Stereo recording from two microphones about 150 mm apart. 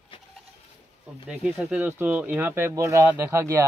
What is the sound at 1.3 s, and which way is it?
Speech, 5° right (ahead or behind).